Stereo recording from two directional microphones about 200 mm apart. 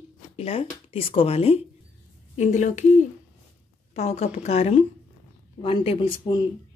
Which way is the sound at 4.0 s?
35° left (ahead or behind).